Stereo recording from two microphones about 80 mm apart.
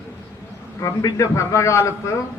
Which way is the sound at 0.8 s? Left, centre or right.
Left.